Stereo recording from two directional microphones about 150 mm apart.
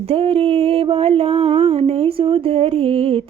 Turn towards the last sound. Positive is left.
turn(degrees=-40)  # may be behind; listen again after turning